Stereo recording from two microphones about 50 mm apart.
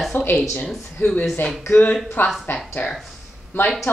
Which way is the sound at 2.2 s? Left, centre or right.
Left.